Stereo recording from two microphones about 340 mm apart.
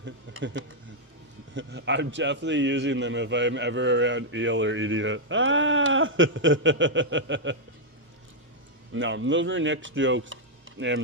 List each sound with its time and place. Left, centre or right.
0.0 s a man's voice: right
8.9 s speech: right